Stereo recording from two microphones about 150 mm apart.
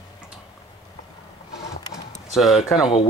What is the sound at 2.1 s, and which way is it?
Speech, centre (ahead or behind).